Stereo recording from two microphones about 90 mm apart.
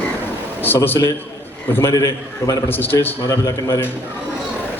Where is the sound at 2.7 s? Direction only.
25° left (ahead or behind).